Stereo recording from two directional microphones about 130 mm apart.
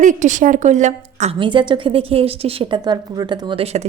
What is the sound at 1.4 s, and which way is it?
A woman's voice, 40° right (ahead or behind).